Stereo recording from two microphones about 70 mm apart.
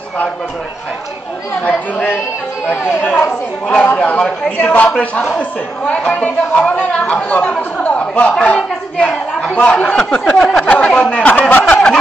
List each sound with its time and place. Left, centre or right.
3.0 s speech: centre
9.6 s speech: left